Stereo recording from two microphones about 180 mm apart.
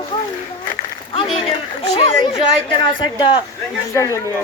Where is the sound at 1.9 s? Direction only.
30° left (ahead or behind).